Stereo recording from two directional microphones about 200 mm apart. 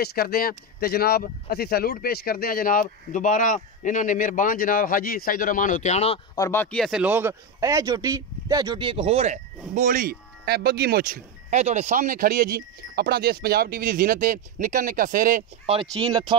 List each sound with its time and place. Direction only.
0.0 s speech: 50° left (ahead or behind); by 6.2 s 30° left (ahead or behind)
6.3 s a man's voice: 15° left (ahead or behind); by 15.7 s 40° right (ahead or behind)
15.7 s speech: 20° right (ahead or behind)